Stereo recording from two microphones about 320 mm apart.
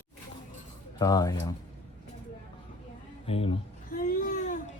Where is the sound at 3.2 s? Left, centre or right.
Centre.